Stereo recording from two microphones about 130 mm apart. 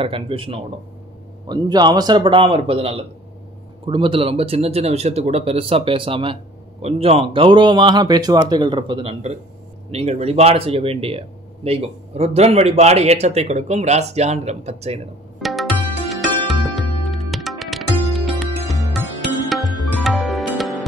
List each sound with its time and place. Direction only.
0.0 s speech: 45° right (ahead or behind)
1.5 s speech: 35° right (ahead or behind)
9.8 s speech: 55° right (ahead or behind)
15.4 s music: centre (ahead or behind)